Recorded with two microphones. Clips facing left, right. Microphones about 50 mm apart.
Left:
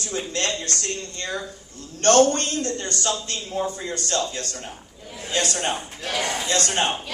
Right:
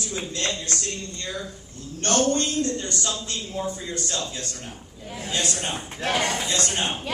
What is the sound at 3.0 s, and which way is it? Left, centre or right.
A man's voice, left.